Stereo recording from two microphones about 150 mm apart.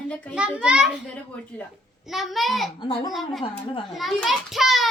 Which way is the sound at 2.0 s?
Centre (ahead or behind).